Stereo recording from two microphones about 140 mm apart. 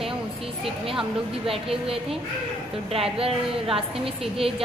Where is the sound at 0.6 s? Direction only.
40° right (ahead or behind).